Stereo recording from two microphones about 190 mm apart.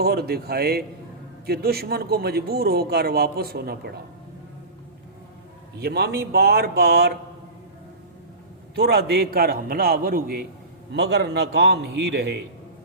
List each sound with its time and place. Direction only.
0.0 s speech: 55° right (ahead or behind)
5.8 s speech: 55° right (ahead or behind)
8.7 s a man's voice: 55° right (ahead or behind)